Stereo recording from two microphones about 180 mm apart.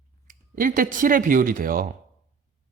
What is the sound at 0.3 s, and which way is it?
Speech, 45° right (ahead or behind).